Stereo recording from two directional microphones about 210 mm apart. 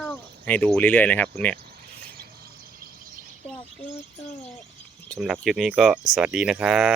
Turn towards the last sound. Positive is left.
turn(degrees=-5)  # may be behind; listen again after turning